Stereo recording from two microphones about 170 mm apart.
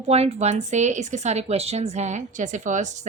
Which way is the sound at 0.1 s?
40° right (ahead or behind).